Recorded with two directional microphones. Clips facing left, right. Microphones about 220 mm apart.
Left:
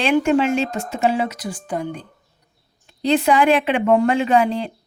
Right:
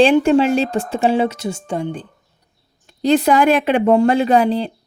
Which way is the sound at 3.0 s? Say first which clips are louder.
Right 3 dB; 40° right (ahead or behind).